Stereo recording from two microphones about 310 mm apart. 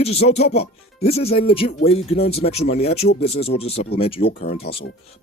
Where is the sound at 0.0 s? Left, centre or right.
Centre.